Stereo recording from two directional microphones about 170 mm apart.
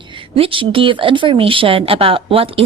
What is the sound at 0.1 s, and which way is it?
Speech, 30° right (ahead or behind).